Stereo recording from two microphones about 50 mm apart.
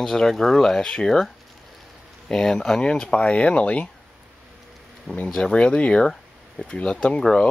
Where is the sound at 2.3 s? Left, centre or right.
Centre.